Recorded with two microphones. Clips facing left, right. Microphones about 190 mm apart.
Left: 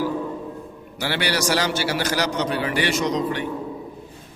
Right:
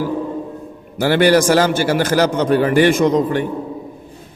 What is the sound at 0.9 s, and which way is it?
A man's voice, 50° right (ahead or behind).